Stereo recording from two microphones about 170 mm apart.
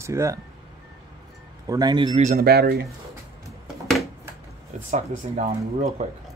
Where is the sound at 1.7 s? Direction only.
25° right (ahead or behind).